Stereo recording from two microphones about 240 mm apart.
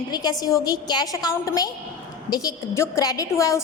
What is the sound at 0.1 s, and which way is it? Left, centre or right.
A woman's voice, centre.